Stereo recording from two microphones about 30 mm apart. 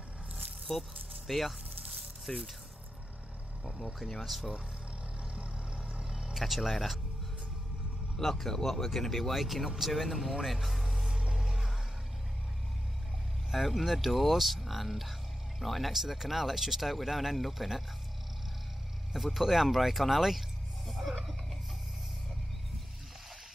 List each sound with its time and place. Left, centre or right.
0.7 s speech: centre
4.1 s speech: centre
5.9 s a sound: right
6.3 s speech: centre
8.2 s speech: centre
10.1 s speech: centre
10.4 s music: centre
13.5 s speech: centre
19.1 s speech: centre
20.8 s a sound: centre